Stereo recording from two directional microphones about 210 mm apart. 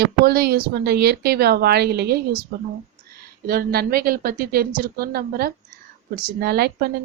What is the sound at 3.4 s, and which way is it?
Speech, 45° right (ahead or behind).